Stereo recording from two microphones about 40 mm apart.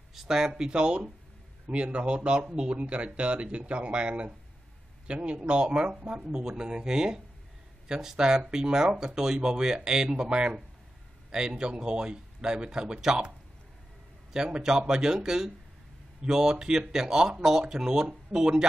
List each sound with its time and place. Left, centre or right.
0.1 s speech: centre
14.3 s speech: centre